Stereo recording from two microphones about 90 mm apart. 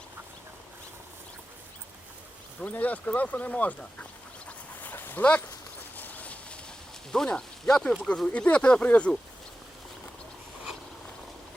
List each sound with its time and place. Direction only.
2.6 s speech: 15° left (ahead or behind)
4.4 s dog: 20° left (ahead or behind)
6.0 s a sound: 20° left (ahead or behind)
7.1 s speech: 5° left (ahead or behind)